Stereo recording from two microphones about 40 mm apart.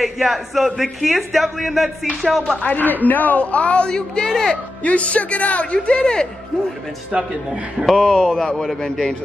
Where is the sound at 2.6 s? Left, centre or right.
Left.